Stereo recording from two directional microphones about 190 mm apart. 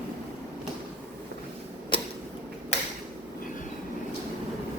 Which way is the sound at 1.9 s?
25° left (ahead or behind).